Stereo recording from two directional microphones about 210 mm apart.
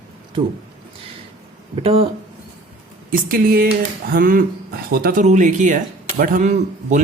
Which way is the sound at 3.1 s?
40° right (ahead or behind).